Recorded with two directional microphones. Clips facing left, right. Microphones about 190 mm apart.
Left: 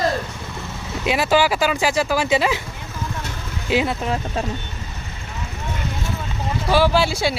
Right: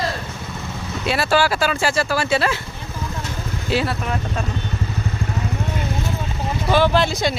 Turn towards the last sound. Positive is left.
turn(degrees=10)  # may be behind; listen again after turning